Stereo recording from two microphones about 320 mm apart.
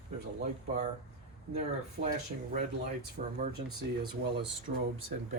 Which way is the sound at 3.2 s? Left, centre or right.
Right.